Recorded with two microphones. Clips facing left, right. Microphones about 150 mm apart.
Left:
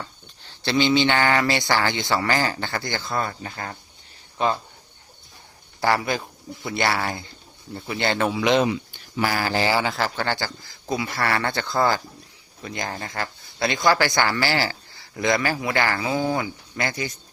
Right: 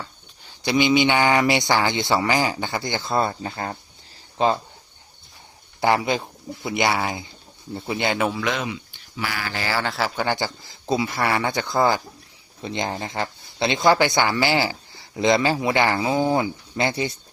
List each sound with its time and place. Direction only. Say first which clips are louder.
0.0 s speech: even; 10° right (ahead or behind); by 4.5 s 30° right (ahead or behind)
5.8 s speech: right 2 dB; 20° right (ahead or behind)
8.4 s speech: left 6 dB; 20° left (ahead or behind)
8.6 s speech: left 6 dB; 40° left (ahead or behind)
9.8 s speech: even; centre (ahead or behind)
10.2 s speech: right 2 dB; 15° right (ahead or behind)